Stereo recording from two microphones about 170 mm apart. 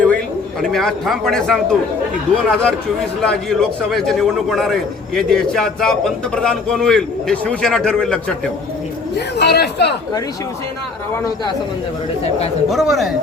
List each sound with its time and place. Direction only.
0.7 s a man's voice: centre (ahead or behind)
9.1 s speech: 80° left
12.6 s a man's voice: centre (ahead or behind)